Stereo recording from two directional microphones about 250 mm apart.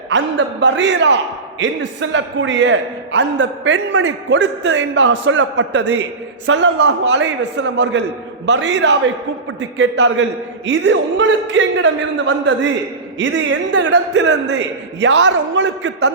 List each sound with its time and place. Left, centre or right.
0.1 s a man's voice: right